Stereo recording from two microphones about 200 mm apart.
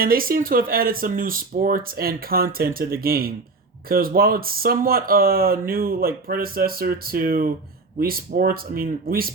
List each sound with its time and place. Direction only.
0.0 s speech: 45° right (ahead or behind)